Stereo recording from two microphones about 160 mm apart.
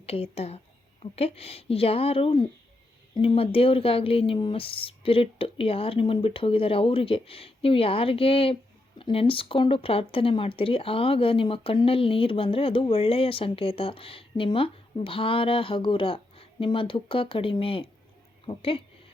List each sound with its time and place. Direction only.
0.0 s speech: 40° left (ahead or behind)